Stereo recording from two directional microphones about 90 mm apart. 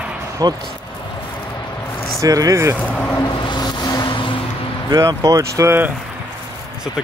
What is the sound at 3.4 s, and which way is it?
Vehicle, 55° left (ahead or behind).